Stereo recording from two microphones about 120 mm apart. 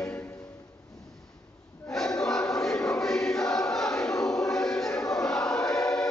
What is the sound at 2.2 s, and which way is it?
Choir, 5° left (ahead or behind).